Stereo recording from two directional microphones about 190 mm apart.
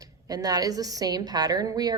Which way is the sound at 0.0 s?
20° right (ahead or behind).